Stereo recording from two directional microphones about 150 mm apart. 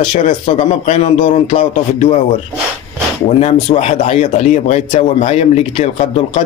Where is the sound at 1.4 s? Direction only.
40° left (ahead or behind).